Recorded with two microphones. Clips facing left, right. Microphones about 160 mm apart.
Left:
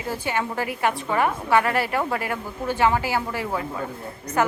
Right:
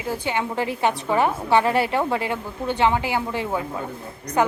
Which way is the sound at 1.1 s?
25° right (ahead or behind).